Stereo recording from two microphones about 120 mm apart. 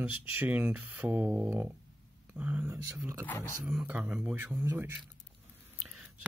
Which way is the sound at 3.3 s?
20° left (ahead or behind).